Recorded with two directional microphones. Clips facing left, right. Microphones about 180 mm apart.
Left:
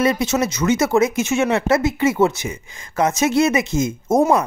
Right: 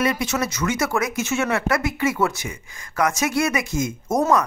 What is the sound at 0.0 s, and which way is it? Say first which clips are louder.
Speech: left 4 dB; 25° left (ahead or behind).